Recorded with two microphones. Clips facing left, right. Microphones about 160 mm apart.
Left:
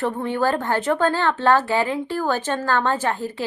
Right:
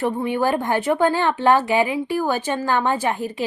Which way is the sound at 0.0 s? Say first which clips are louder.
Right 1 dB; 15° right (ahead or behind).